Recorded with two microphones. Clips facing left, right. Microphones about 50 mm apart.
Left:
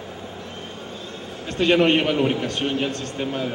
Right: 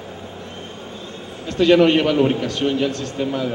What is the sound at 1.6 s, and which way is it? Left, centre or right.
A man's voice, left.